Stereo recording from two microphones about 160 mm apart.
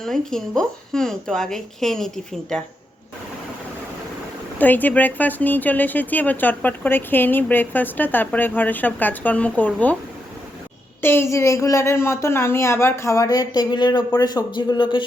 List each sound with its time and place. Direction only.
0.0 s a woman's voice: 5° left (ahead or behind)
4.5 s a woman's voice: 10° left (ahead or behind)
11.0 s speech: 15° left (ahead or behind); by 15.0 s 30° left (ahead or behind)